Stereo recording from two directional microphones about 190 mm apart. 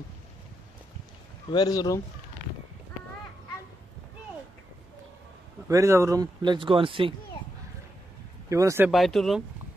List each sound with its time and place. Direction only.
1.5 s speech: 20° left (ahead or behind)
5.7 s speech: 15° right (ahead or behind)
8.5 s speech: 15° right (ahead or behind)
8.9 s speech: centre (ahead or behind)